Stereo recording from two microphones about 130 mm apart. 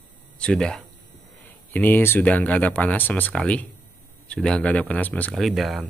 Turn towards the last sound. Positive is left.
turn(degrees=0)  # may be behind; listen again after turning